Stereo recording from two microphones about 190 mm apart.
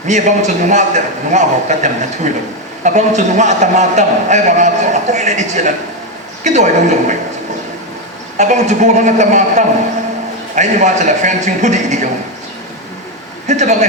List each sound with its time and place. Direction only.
0.1 s a man's voice: 40° right (ahead or behind)
8.4 s a man's voice: 40° right (ahead or behind)
13.5 s speech: 40° right (ahead or behind)